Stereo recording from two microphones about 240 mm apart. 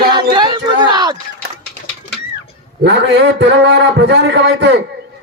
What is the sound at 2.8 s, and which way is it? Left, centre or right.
Speech, right.